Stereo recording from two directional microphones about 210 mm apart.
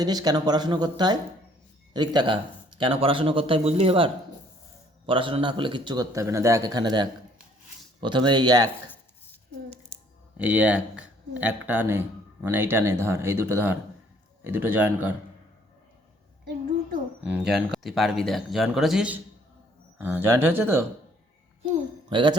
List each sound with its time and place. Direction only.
0.0 s speech: 20° right (ahead or behind)
10.3 s speech: 5° right (ahead or behind)
17.7 s speech: centre (ahead or behind)
22.1 s speech: 20° right (ahead or behind)